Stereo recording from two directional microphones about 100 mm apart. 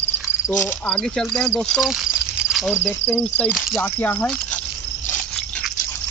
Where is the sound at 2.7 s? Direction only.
15° left (ahead or behind).